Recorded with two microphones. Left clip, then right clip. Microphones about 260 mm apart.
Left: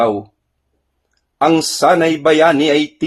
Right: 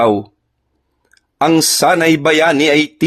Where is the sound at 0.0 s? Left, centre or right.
Right.